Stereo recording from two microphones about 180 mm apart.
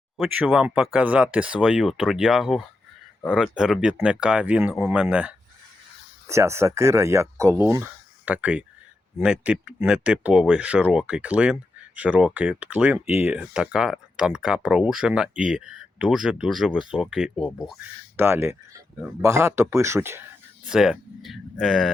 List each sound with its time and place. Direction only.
0.2 s speech: 5° right (ahead or behind)
18.2 s speech: 15° right (ahead or behind)
20.7 s speech: centre (ahead or behind)